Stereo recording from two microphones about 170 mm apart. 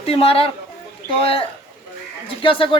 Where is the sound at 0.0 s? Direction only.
35° left (ahead or behind).